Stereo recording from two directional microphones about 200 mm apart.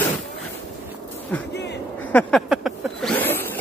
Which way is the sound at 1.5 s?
55° left (ahead or behind).